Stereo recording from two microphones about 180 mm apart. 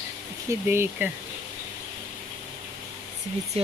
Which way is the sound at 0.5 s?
15° right (ahead or behind).